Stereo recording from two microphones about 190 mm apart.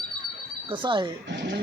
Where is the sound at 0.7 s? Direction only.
25° right (ahead or behind).